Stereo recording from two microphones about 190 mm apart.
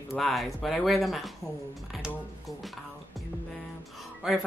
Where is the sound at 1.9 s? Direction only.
Centre (ahead or behind).